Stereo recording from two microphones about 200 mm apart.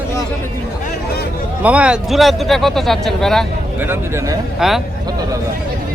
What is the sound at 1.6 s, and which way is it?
Speech, 5° right (ahead or behind).